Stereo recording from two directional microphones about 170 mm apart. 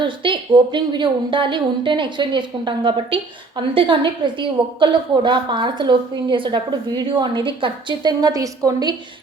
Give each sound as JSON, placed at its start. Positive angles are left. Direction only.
{"t": 0.0, "sound": "a woman's voice", "side_deg": -30}